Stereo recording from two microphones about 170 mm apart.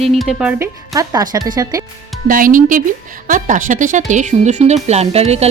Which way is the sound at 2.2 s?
55° right (ahead or behind).